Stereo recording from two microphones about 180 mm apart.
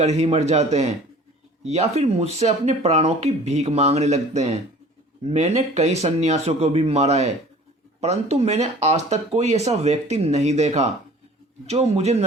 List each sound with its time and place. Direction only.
0.0 s speech: 35° right (ahead or behind)